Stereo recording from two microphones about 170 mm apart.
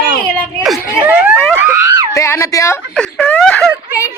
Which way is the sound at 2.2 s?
15° left (ahead or behind).